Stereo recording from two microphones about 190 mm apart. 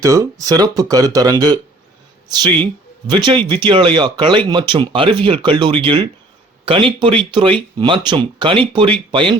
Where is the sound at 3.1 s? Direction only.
25° right (ahead or behind).